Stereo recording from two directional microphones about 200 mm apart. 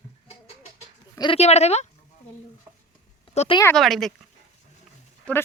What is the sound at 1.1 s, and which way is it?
Speech, 25° left (ahead or behind).